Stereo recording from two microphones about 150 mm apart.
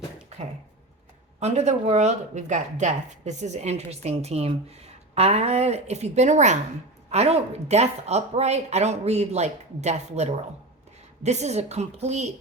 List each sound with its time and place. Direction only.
1.4 s a woman's voice: 50° right (ahead or behind)